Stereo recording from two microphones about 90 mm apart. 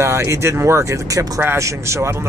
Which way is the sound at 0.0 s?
30° right (ahead or behind).